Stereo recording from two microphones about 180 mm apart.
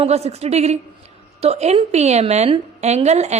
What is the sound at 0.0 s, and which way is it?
A woman's voice, 35° right (ahead or behind).